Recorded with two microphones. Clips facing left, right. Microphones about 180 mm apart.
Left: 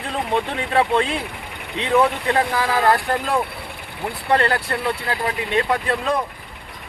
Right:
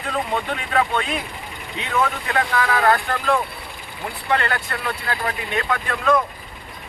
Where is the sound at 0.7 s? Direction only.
30° left (ahead or behind).